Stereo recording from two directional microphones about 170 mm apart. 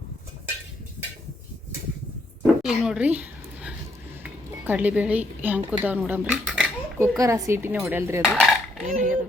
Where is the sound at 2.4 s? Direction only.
5° right (ahead or behind).